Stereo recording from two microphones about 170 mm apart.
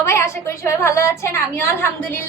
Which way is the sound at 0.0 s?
15° left (ahead or behind).